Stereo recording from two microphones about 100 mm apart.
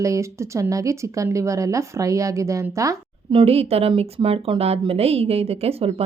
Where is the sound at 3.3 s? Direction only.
75° right (ahead or behind); by 5.9 s 90° right.